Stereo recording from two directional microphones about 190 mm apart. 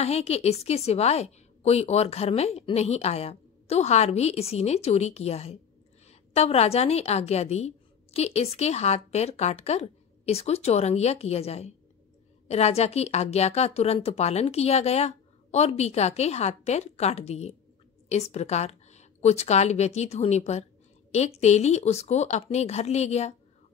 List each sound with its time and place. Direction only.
0.0 s a woman's voice: 35° left (ahead or behind)